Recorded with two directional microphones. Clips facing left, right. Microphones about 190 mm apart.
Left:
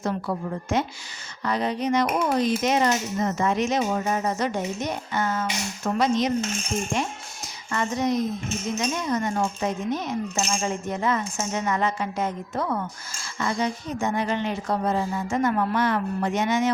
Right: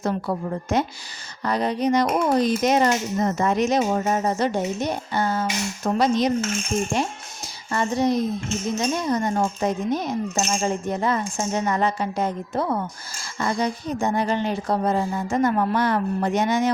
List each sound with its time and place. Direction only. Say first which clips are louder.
0.0 s speech: right 2 dB; 40° right (ahead or behind)
7.4 s speech: right 3 dB; 30° right (ahead or behind)